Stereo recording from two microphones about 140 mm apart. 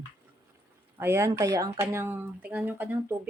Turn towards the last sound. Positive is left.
turn(degrees=-15)  # may be behind; listen again after turning